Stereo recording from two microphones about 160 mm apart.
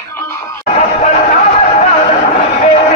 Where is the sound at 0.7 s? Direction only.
50° left (ahead or behind).